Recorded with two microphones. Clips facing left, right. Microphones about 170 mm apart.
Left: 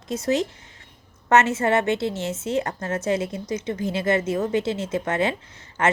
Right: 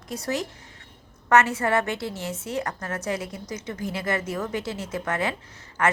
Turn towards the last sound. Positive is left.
turn(degrees=25)  # may be behind; listen again after turning